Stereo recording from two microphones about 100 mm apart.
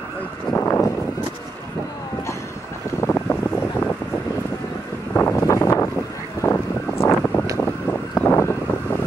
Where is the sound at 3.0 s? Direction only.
20° left (ahead or behind).